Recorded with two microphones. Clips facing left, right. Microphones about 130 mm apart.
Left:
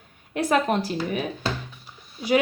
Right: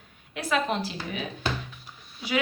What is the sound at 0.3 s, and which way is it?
Speech, 50° left (ahead or behind).